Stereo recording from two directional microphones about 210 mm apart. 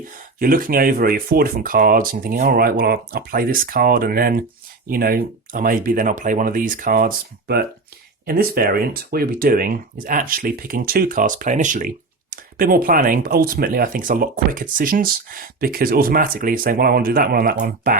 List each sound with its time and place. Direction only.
0.3 s speech: 40° right (ahead or behind)